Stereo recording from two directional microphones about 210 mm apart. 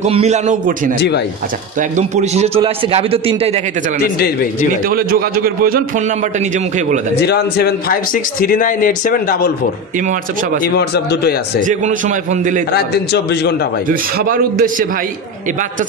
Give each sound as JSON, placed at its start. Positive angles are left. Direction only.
{"t": 0.0, "sound": "a man's voice", "side_deg": -30}
{"t": 0.9, "sound": "a man's voice", "side_deg": 55}
{"t": 1.8, "sound": "a man's voice", "side_deg": -35}
{"t": 4.0, "sound": "a man's voice", "side_deg": 45}
{"t": 4.8, "sound": "a man's voice", "side_deg": -45}
{"t": 7.2, "sound": "a man's voice", "side_deg": 50}
{"t": 9.9, "sound": "a man's voice", "side_deg": -40}
{"t": 10.6, "sound": "a man's voice", "side_deg": 50}
{"t": 11.6, "sound": "a man's voice", "side_deg": -35}
{"t": 12.7, "sound": "a man's voice", "side_deg": 50}
{"t": 13.8, "sound": "a man's voice", "side_deg": -45}